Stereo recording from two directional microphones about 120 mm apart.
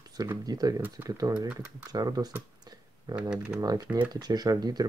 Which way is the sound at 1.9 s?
35° right (ahead or behind).